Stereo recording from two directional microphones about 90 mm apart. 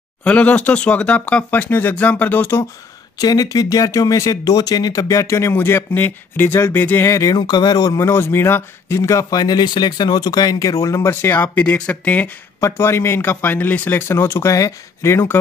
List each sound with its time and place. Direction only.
0.2 s speech: 15° left (ahead or behind)
3.2 s speech: 45° left (ahead or behind); by 7.1 s 20° left (ahead or behind)
7.1 s speech: 40° left (ahead or behind)
8.0 s speech: 30° left (ahead or behind)
12.5 s a man's voice: 30° left (ahead or behind)